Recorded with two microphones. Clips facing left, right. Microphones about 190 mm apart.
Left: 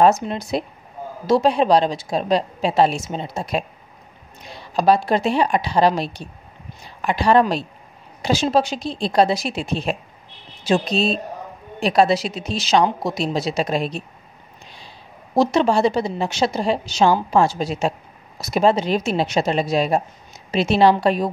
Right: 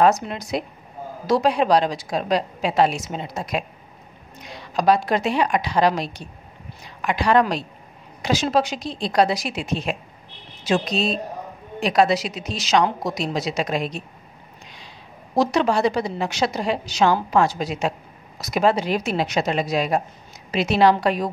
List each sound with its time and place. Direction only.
0.3 s a woman's voice: 30° left (ahead or behind)
15.3 s a woman's voice: 25° left (ahead or behind)